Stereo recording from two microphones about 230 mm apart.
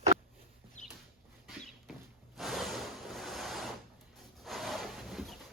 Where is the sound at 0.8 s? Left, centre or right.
Left.